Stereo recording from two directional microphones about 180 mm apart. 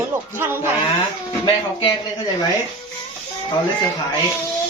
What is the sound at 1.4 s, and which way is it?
Speech, 25° left (ahead or behind).